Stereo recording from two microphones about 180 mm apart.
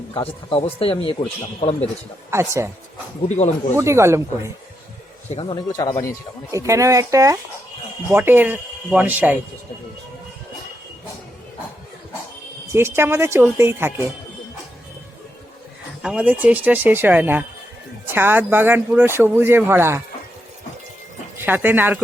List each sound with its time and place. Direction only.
0.1 s speech: 30° left (ahead or behind)
2.3 s speech: 15° right (ahead or behind)
3.2 s speech: 40° left (ahead or behind)
3.8 s speech: 15° right (ahead or behind)
5.3 s speech: 30° left (ahead or behind)
6.5 s speech: 15° right (ahead or behind)
12.7 s speech: 15° right (ahead or behind)
16.0 s speech: 5° right (ahead or behind)
21.3 s speech: 10° right (ahead or behind)